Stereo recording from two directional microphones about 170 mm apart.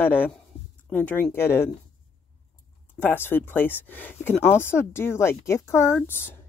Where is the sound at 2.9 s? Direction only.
10° left (ahead or behind).